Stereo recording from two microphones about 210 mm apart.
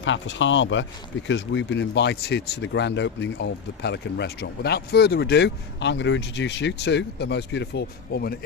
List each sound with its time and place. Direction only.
0.0 s speech: 60° left (ahead or behind)